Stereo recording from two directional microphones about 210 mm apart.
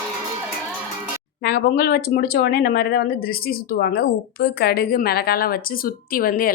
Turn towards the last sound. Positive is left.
turn(degrees=45)  # may be behind; listen again after turning